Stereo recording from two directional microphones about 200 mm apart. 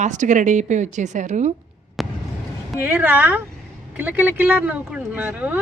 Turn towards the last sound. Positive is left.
turn(degrees=-10)  # may be behind; listen again after turning